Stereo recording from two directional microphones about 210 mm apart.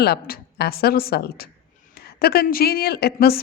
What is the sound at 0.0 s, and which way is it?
A woman's voice, 50° left (ahead or behind).